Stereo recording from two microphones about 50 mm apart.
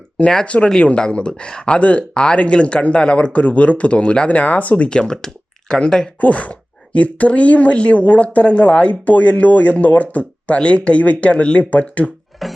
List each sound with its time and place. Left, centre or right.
0.4 s speech: left
4.9 s speech: centre
6.1 s speech: left
12.4 s music: centre